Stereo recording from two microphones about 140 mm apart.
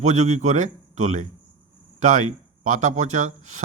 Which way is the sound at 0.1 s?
60° right (ahead or behind).